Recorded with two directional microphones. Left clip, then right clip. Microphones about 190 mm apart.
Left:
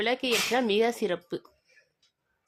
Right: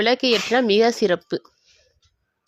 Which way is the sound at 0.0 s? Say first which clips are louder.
Right 8 dB; 30° right (ahead or behind).